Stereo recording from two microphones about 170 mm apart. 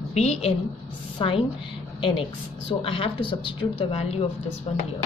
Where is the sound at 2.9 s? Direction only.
30° left (ahead or behind).